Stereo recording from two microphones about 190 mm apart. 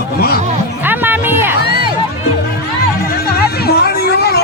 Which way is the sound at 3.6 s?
55° left (ahead or behind).